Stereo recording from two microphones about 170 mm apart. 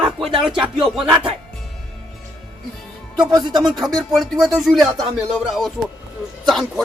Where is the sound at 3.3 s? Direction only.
25° right (ahead or behind).